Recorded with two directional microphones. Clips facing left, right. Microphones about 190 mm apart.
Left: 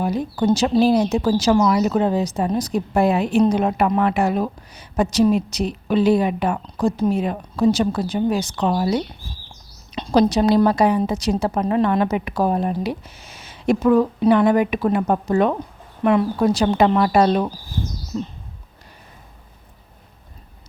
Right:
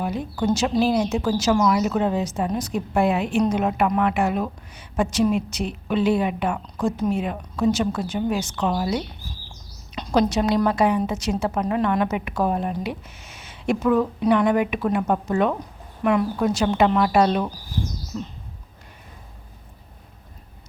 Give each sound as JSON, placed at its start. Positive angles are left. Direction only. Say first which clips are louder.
{"t": 0.0, "sound": "speech", "louder": "left 4 dB", "side_deg": 40}